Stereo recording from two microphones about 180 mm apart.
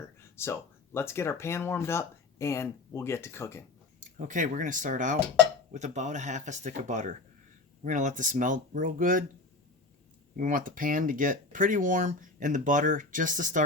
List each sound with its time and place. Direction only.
0.2 s speech: 15° left (ahead or behind)
4.0 s speech: 45° right (ahead or behind)
10.3 s speech: 50° right (ahead or behind)